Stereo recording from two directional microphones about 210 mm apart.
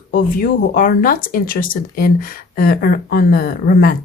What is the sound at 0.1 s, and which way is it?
Speech, 40° left (ahead or behind).